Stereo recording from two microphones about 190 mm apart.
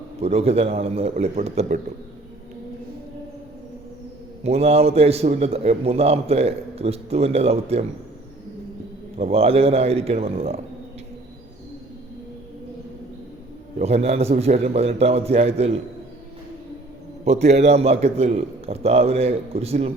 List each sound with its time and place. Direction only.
0.2 s a man's voice: 35° right (ahead or behind)
4.4 s a man's voice: 35° right (ahead or behind)
9.1 s a man's voice: 30° right (ahead or behind)
13.7 s a man's voice: 35° right (ahead or behind)
17.2 s a man's voice: 35° right (ahead or behind)